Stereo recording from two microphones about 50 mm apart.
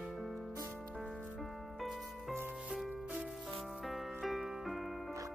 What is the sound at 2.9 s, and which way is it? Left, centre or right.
Music, right.